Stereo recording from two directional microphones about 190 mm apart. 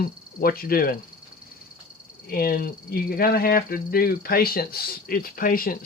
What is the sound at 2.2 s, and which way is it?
Speech, 50° left (ahead or behind).